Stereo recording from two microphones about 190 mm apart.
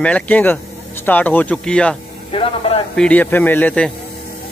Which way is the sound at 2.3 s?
30° left (ahead or behind).